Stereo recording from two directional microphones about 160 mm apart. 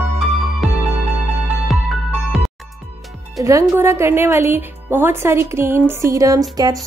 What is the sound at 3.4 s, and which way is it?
A woman's voice, 20° right (ahead or behind).